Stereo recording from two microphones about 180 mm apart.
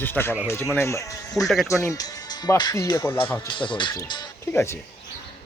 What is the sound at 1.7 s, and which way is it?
Speech, 15° left (ahead or behind).